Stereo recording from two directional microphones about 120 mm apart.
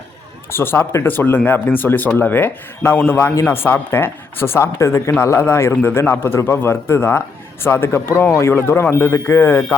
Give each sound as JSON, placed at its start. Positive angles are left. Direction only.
{"t": 0.5, "sound": "speech", "side_deg": 20}